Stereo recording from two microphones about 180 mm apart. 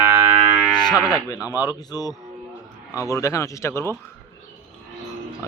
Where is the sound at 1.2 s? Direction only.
20° left (ahead or behind).